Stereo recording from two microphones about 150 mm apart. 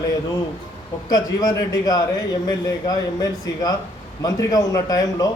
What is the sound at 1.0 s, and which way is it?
A man's voice, 25° left (ahead or behind).